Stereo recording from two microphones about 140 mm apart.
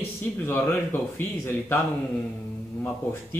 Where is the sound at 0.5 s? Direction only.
15° left (ahead or behind).